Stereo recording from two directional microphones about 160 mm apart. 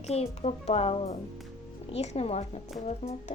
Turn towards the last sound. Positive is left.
turn(degrees=40)  # may be behind; listen again after turning